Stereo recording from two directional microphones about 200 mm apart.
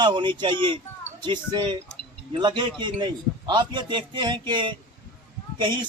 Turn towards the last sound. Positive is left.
turn(degrees=-25)  # may be behind; listen again after turning